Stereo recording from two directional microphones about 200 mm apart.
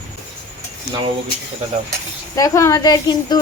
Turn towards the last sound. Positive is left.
turn(degrees=20)  # may be behind; listen again after turning